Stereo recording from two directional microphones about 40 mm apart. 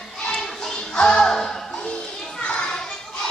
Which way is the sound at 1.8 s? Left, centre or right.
Left.